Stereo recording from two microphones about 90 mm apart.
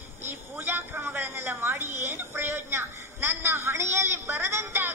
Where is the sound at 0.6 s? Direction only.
25° right (ahead or behind).